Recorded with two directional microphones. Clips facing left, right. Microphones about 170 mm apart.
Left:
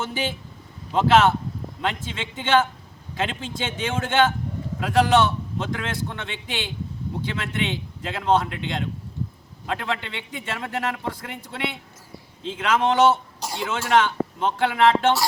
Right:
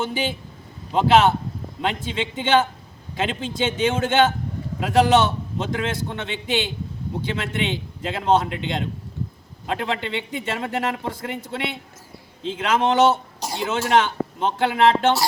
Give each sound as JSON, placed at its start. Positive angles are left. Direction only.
{"t": 0.0, "sound": "a man's voice", "side_deg": -15}